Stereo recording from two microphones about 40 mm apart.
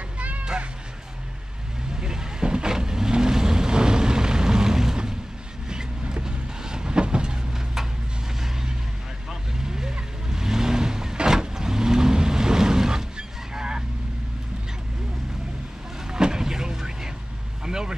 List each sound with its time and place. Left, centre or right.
0.2 s music: right
2.0 s vehicle: centre
9.3 s vehicle: centre
16.1 s vehicle: centre